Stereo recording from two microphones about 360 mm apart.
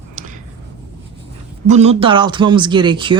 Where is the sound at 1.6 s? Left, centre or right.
Centre.